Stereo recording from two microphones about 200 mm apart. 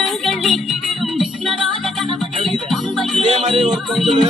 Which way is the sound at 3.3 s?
35° right (ahead or behind).